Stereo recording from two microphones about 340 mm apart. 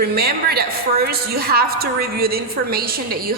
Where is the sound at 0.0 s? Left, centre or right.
Right.